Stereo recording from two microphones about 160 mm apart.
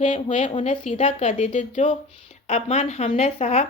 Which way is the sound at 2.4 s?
40° left (ahead or behind).